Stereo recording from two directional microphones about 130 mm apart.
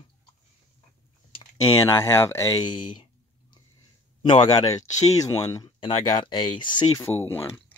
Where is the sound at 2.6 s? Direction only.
35° left (ahead or behind).